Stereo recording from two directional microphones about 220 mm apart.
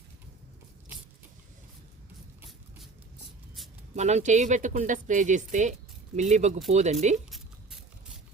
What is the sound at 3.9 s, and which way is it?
Speech, 30° right (ahead or behind).